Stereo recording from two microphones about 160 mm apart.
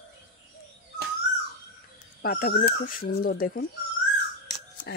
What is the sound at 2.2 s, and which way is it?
Speech, 65° left (ahead or behind).